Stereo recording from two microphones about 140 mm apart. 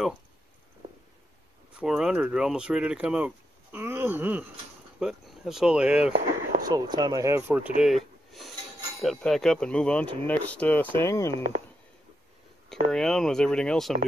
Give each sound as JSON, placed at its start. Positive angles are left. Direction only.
{"t": 1.8, "sound": "speech", "side_deg": -5}
{"t": 6.6, "sound": "speech", "side_deg": -30}
{"t": 12.6, "sound": "speech", "side_deg": 5}